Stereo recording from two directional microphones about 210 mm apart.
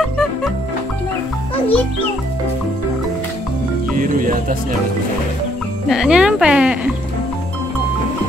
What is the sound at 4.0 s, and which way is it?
Speech, 40° right (ahead or behind).